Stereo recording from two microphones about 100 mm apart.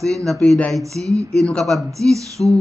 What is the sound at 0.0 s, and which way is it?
Speech, 5° left (ahead or behind).